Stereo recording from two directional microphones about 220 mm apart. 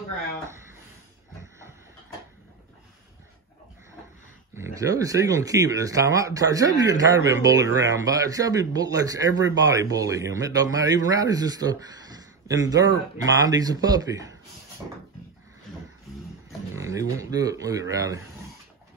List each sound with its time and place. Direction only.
4.6 s speech: 15° right (ahead or behind)
16.7 s speech: 15° right (ahead or behind)